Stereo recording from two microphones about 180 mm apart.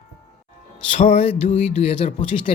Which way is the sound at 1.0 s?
35° left (ahead or behind).